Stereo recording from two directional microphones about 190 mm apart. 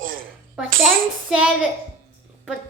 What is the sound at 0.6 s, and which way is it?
Hands, 5° right (ahead or behind).